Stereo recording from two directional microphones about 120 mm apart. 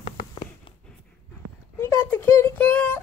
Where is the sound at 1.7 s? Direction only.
20° left (ahead or behind).